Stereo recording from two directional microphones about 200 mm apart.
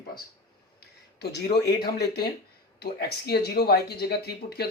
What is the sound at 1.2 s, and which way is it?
Speech, 55° left (ahead or behind).